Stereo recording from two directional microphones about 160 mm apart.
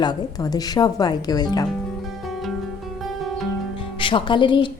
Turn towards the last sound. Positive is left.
turn(degrees=30)  # may be behind; listen again after turning